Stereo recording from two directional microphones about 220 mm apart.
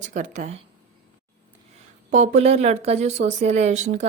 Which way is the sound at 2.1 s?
30° right (ahead or behind).